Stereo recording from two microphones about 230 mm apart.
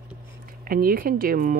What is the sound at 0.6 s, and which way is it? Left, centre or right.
Speech, right.